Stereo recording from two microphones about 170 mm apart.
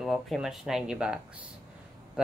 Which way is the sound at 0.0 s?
Centre (ahead or behind).